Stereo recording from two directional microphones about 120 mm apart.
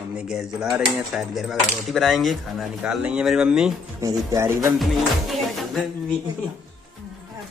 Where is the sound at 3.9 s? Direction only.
30° right (ahead or behind).